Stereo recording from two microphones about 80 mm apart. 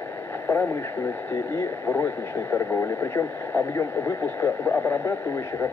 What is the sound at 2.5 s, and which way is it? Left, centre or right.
Speech, left.